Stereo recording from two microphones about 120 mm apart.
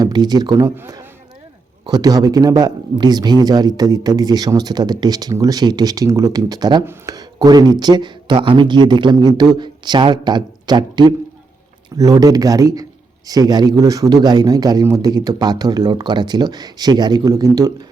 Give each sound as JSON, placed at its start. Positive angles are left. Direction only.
{"t": 0.0, "sound": "speech", "side_deg": -35}
{"t": 1.8, "sound": "speech", "side_deg": -35}